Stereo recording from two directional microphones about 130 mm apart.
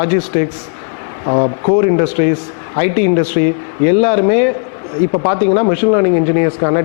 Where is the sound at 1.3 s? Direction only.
20° left (ahead or behind).